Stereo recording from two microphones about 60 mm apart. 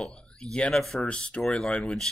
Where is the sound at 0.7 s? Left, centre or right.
Centre.